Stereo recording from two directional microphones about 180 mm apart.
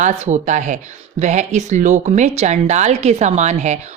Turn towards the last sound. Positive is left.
turn(degrees=-40)  # may be behind; listen again after turning